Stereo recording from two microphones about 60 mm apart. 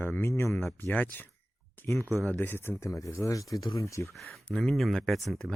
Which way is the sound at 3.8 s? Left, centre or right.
Left.